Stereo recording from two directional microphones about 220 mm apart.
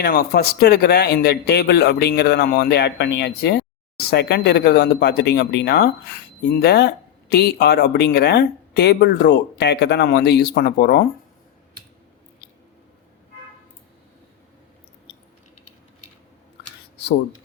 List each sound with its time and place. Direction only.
0.0 s speech: 45° left (ahead or behind)